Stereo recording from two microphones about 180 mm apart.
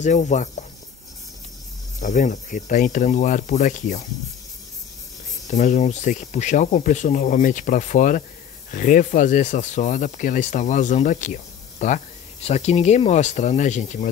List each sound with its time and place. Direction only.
0.0 s speech: 40° left (ahead or behind)
2.0 s speech: 40° left (ahead or behind)
5.5 s speech: 40° left (ahead or behind)